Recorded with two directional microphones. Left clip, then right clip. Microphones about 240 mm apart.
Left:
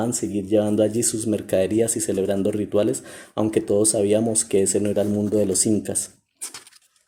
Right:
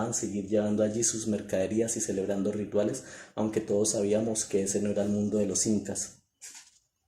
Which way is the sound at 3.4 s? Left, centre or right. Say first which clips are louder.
Left 8 dB; left.